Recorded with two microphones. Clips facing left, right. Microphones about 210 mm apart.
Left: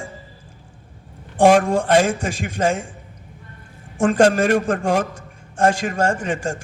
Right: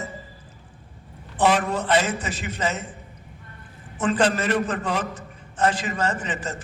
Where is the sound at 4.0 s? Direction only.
45° left (ahead or behind).